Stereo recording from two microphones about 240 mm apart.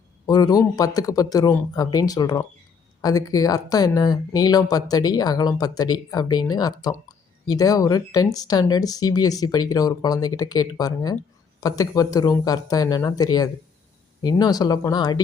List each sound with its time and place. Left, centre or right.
0.3 s speech: centre